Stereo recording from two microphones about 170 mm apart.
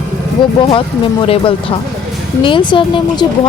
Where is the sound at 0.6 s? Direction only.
30° left (ahead or behind).